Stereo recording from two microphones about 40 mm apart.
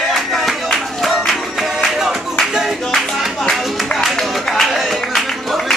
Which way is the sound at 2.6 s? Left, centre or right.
Centre.